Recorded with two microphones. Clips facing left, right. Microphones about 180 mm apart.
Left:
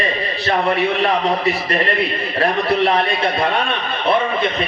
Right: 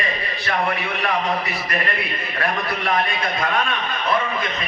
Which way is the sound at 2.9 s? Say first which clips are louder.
Left 5 dB; 30° left (ahead or behind).